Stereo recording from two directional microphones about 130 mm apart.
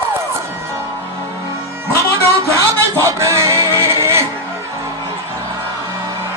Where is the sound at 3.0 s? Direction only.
25° right (ahead or behind).